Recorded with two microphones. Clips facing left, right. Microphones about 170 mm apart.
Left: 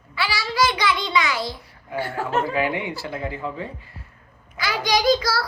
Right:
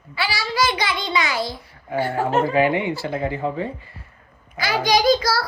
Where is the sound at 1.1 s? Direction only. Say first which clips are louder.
Even; 45° right (ahead or behind).